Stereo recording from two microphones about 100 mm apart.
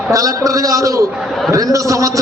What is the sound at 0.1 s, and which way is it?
A man's voice, 35° right (ahead or behind).